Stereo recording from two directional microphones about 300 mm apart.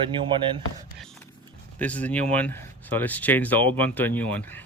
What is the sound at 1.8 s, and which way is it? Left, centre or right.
Speech, centre.